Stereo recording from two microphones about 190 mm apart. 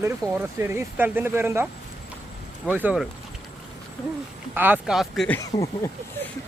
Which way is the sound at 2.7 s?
10° right (ahead or behind).